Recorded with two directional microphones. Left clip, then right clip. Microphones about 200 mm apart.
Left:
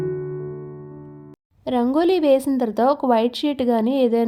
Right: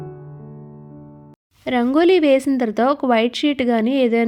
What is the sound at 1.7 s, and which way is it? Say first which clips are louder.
A woman's voice: right 3 dB; 25° right (ahead or behind).